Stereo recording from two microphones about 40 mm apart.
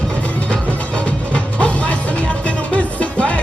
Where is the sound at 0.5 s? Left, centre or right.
Left.